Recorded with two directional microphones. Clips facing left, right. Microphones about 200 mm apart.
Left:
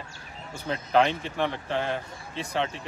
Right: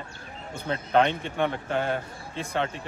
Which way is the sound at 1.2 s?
Centre (ahead or behind).